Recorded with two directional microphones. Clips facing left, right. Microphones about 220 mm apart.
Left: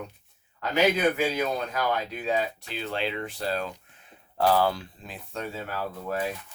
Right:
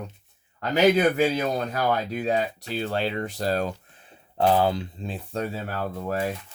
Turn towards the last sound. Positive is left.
turn(degrees=-40)  # may be behind; listen again after turning